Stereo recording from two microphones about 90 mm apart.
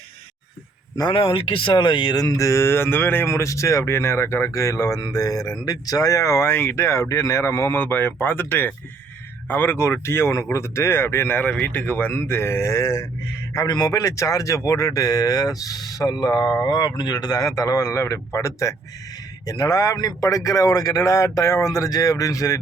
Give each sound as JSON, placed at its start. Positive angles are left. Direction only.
{"t": 1.1, "sound": "speech", "side_deg": 85}
{"t": 3.2, "sound": "speech", "side_deg": 35}
{"t": 4.9, "sound": "speech", "side_deg": 50}
{"t": 6.5, "sound": "speech", "side_deg": 25}
{"t": 19.5, "sound": "speech", "side_deg": 45}